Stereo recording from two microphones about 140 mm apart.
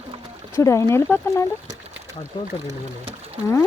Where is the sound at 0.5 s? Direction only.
20° left (ahead or behind).